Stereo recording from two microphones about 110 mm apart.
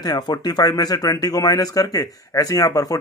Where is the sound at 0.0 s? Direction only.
40° left (ahead or behind).